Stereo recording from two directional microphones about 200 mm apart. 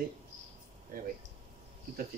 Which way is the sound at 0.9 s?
45° right (ahead or behind).